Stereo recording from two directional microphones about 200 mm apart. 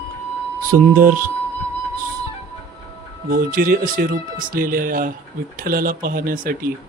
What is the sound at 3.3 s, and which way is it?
Speech, 45° right (ahead or behind).